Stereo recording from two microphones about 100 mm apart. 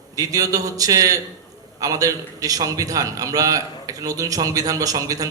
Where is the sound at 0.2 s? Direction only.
35° right (ahead or behind).